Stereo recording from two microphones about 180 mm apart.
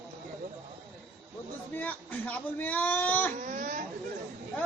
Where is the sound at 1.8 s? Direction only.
10° left (ahead or behind).